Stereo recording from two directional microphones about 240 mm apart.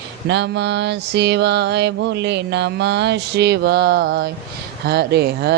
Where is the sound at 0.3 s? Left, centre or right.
Right.